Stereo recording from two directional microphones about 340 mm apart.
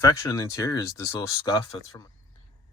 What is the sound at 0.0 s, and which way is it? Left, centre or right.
Speech, centre.